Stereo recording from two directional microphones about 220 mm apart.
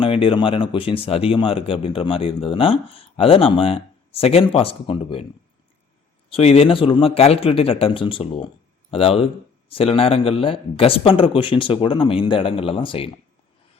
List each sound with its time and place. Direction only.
0.0 s speech: 25° left (ahead or behind)
6.3 s speech: 25° left (ahead or behind)